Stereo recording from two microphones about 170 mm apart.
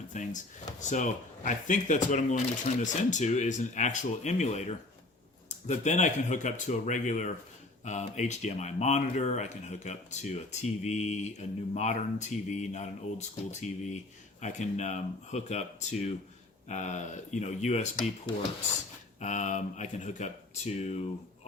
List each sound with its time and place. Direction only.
0.1 s speech: 45° left (ahead or behind)
19.2 s speech: 45° left (ahead or behind)